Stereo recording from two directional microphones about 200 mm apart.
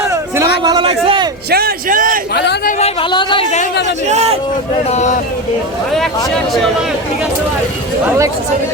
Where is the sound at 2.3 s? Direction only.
55° left (ahead or behind).